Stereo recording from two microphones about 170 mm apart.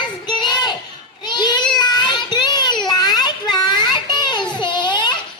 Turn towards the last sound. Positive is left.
turn(degrees=25)  # may be behind; listen again after turning